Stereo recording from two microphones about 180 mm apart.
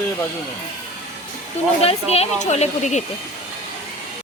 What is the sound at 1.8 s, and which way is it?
Speech, 35° left (ahead or behind).